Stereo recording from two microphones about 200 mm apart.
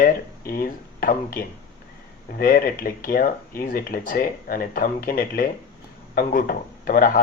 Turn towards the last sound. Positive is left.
turn(degrees=45)  # may be behind; listen again after turning